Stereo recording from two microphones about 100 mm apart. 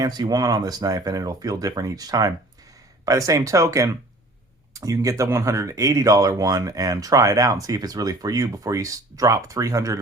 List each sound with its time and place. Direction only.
0.0 s speech: 40° right (ahead or behind)